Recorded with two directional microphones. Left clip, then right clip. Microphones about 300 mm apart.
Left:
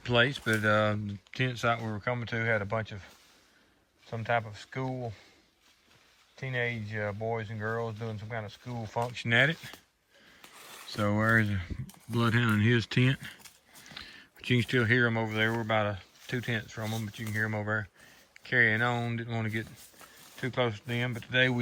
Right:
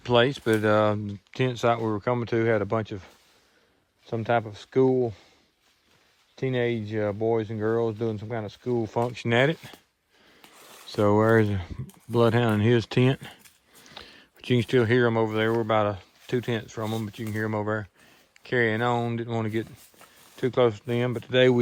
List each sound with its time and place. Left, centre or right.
0.0 s speech: centre
4.2 s speech: centre
6.4 s speech: right
8.6 s speech: right
9.1 s speech: centre
10.6 s speech: centre